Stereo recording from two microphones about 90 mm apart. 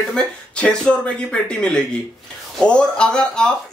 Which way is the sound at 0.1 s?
10° left (ahead or behind).